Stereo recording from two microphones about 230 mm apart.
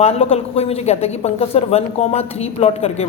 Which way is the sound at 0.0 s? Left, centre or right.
Left.